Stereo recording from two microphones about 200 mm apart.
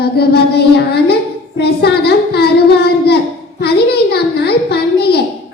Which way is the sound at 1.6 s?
55° left (ahead or behind).